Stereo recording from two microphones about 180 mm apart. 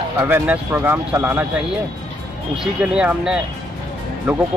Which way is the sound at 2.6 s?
5° right (ahead or behind).